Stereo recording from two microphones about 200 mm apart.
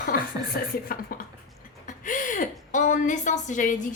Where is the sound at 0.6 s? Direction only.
50° left (ahead or behind).